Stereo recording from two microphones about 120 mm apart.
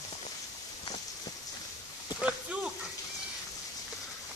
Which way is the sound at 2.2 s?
10° right (ahead or behind).